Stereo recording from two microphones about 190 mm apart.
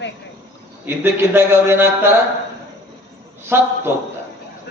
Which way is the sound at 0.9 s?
10° right (ahead or behind).